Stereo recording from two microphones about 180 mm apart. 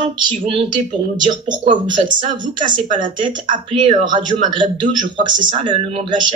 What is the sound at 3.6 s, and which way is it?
A man's voice, 30° right (ahead or behind).